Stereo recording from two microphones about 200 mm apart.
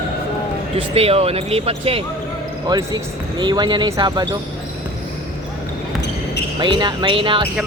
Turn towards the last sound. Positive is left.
turn(degrees=-25)  # may be behind; listen again after turning